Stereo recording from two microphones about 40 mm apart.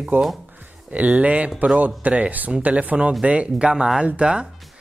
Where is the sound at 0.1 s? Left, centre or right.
Right.